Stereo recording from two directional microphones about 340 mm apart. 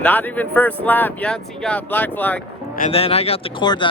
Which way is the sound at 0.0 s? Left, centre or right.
Centre.